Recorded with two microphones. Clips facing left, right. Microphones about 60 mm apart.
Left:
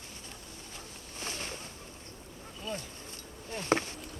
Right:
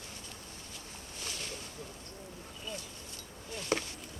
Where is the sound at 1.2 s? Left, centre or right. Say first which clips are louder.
Left 4 dB; left.